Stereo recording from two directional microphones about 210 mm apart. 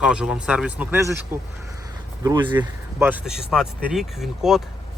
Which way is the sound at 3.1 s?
5° right (ahead or behind).